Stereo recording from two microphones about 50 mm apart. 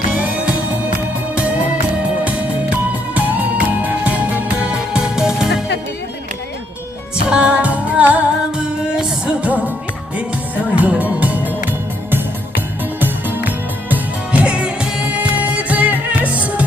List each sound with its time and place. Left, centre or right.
0.2 s music: right; by 5.6 s centre
7.3 s music: right
10.8 s music: right
13.0 s music: right
13.9 s music: right